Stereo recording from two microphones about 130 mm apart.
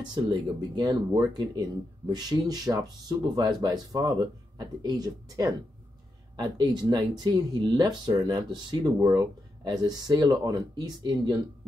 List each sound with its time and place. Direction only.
0.1 s speech: 35° right (ahead or behind)